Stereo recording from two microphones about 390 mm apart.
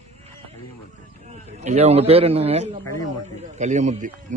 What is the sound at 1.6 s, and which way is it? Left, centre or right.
A man's voice, centre.